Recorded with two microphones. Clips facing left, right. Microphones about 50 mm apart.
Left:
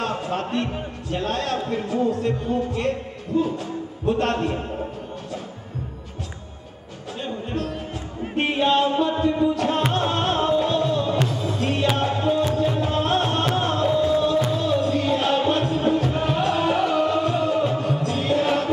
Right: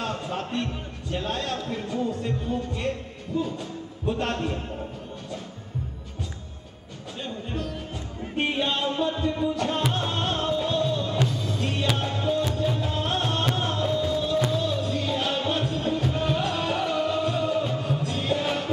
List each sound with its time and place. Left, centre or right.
0.0 s a man's voice: centre
8.4 s music: centre
8.9 s music: left